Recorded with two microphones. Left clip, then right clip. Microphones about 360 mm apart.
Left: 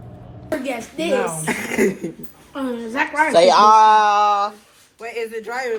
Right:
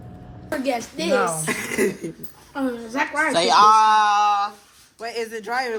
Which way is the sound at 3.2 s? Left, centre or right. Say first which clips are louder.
Left 3 dB; centre.